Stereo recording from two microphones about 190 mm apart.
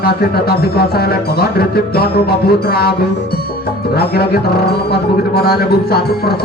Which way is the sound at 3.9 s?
55° left (ahead or behind).